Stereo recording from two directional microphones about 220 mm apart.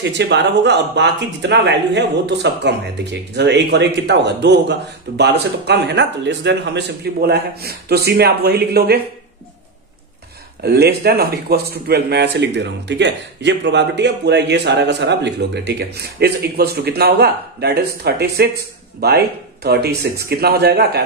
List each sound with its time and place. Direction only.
0.0 s speech: 50° right (ahead or behind)
10.6 s speech: 45° right (ahead or behind)